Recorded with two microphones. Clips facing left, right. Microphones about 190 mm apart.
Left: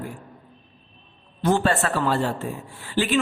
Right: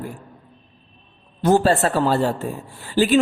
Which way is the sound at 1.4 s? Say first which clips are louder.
Right 5 dB; 35° right (ahead or behind).